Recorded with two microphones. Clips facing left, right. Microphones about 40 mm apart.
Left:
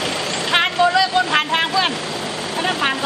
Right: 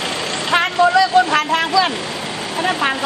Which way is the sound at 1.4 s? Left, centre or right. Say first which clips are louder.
Right 2 dB; left.